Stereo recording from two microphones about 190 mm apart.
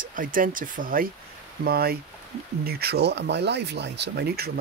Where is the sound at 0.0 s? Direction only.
45° right (ahead or behind).